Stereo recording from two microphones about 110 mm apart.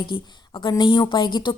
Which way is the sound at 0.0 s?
45° left (ahead or behind).